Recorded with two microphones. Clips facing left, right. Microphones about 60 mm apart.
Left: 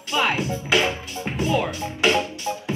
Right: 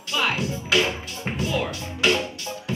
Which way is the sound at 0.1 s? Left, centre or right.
Left.